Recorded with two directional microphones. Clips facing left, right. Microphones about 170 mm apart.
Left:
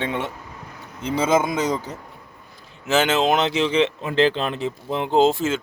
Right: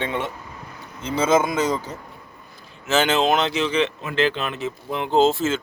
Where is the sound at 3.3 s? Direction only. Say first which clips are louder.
Left 1 dB; 20° left (ahead or behind).